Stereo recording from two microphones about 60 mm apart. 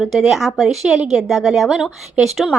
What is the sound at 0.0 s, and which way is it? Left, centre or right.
A woman's voice, centre.